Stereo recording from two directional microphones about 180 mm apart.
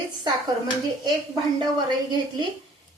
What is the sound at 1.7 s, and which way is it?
Speech, 25° right (ahead or behind).